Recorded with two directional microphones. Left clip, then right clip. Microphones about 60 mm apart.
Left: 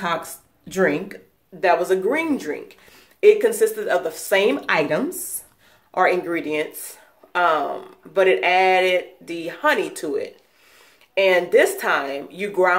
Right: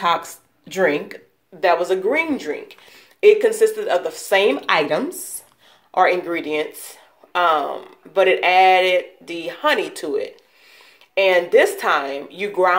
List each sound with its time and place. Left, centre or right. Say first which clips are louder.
0.0 s speech: right 5 dB; centre